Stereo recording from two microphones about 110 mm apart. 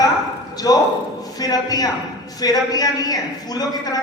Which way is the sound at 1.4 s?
35° left (ahead or behind).